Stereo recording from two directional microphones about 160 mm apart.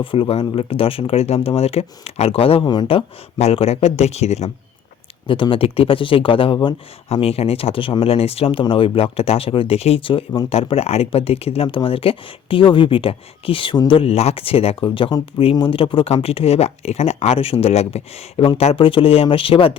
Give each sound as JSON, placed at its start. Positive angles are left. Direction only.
{"t": 0.0, "sound": "speech", "side_deg": 35}